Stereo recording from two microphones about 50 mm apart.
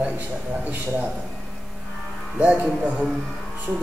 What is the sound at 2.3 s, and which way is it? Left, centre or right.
Speech, right.